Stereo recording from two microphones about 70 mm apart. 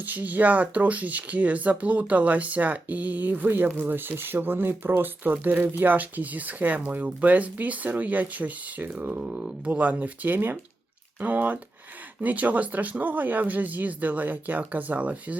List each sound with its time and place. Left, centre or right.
0.0 s speech: right